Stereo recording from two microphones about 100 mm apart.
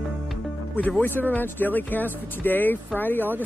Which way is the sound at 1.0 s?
20° left (ahead or behind).